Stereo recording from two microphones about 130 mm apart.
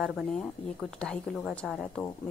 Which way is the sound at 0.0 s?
Centre (ahead or behind).